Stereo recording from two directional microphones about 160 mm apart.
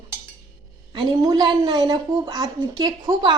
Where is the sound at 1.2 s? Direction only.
25° right (ahead or behind).